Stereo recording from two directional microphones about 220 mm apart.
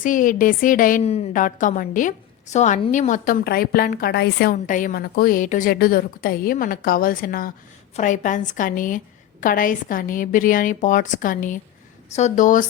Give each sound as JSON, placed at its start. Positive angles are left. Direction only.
{"t": 0.0, "sound": "a woman's voice", "side_deg": 35}
{"t": 4.5, "sound": "a woman's voice", "side_deg": 35}